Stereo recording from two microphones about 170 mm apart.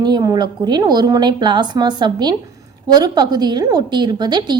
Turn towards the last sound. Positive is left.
turn(degrees=-25)  # may be behind; listen again after turning